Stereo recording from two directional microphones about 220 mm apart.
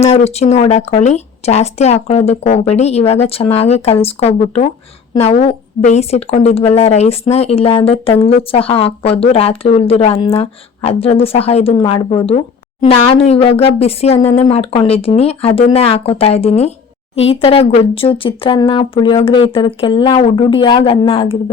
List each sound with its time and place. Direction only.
0.0 s a woman's voice: 30° left (ahead or behind)